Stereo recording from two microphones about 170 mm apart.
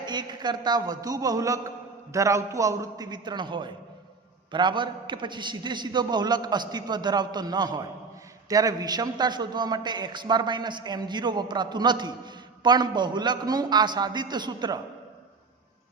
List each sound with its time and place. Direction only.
0.0 s a man's voice: 25° right (ahead or behind)